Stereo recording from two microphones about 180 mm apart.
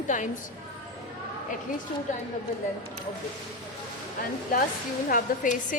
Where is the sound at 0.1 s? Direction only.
45° left (ahead or behind).